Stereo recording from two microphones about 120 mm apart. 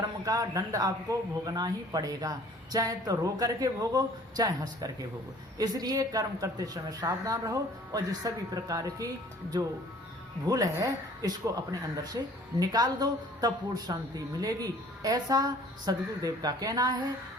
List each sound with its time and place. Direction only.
0.3 s a woman's voice: 30° right (ahead or behind)